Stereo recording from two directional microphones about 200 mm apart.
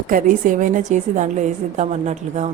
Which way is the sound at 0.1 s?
40° right (ahead or behind).